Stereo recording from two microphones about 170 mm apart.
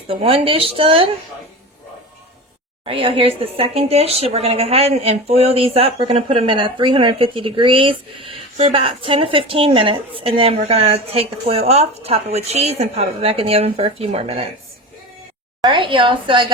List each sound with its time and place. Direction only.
0.1 s speech: 35° right (ahead or behind)
2.8 s speech: 30° right (ahead or behind)
15.6 s a woman's voice: 30° right (ahead or behind)